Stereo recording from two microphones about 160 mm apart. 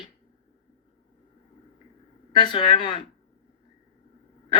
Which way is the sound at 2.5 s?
30° left (ahead or behind).